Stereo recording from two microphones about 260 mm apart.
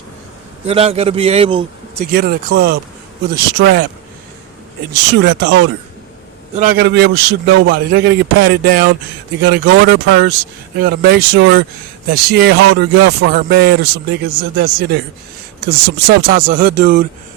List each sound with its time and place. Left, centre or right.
0.7 s a man's voice: right
2.1 s speech: right
5.2 s speech: right
6.6 s speech: right